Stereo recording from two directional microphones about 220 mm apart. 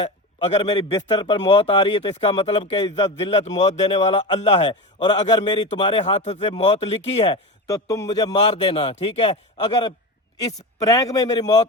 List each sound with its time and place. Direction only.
0.0 s a man's voice: 25° left (ahead or behind)
7.7 s a man's voice: 15° left (ahead or behind)